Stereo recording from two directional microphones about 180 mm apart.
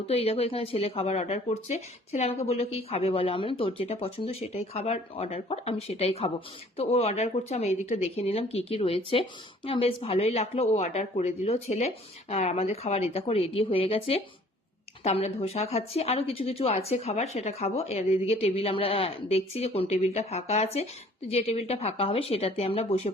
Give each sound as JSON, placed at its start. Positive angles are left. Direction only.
{"t": 0.1, "sound": "a woman's voice", "side_deg": 35}